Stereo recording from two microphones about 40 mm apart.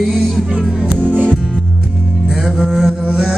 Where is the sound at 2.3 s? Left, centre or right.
Centre.